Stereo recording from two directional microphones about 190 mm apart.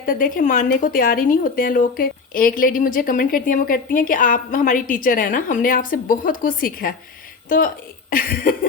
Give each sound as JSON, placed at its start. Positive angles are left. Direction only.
{"t": 0.0, "sound": "a woman's voice", "side_deg": 45}